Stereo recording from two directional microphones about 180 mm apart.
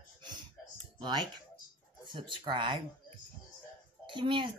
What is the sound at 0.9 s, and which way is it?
Speech, 25° right (ahead or behind).